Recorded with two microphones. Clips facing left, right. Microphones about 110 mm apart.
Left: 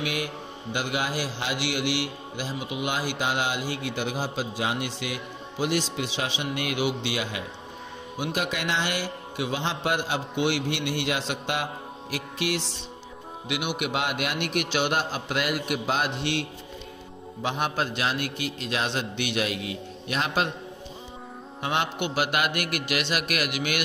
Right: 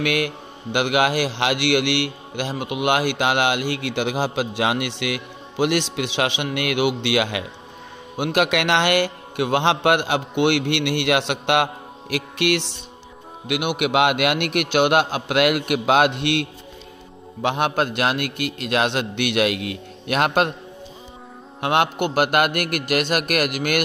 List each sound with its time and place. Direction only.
0.0 s a man's voice: 70° right (ahead or behind)
21.5 s a man's voice: 65° right (ahead or behind)